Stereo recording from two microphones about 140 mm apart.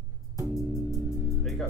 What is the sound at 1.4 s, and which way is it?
Music, 5° left (ahead or behind).